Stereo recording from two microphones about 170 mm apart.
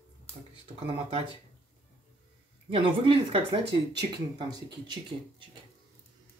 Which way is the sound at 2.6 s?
30° right (ahead or behind).